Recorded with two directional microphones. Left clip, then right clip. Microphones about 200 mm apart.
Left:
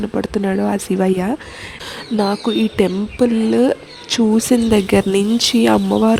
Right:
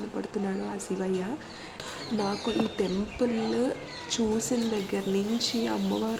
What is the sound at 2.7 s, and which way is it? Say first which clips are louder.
Speech: left 13 dB; 40° left (ahead or behind).